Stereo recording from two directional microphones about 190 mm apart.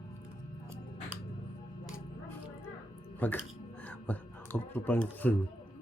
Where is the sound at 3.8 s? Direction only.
10° left (ahead or behind).